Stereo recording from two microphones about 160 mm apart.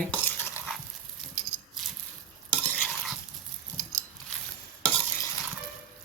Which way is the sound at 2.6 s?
10° left (ahead or behind).